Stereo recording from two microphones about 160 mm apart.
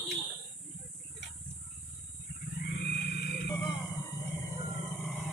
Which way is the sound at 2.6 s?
85° left.